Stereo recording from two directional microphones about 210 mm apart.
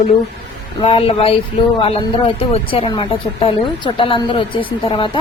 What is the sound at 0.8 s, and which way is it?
Speech, 25° left (ahead or behind).